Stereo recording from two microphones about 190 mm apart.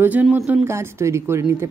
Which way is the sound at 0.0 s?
10° right (ahead or behind).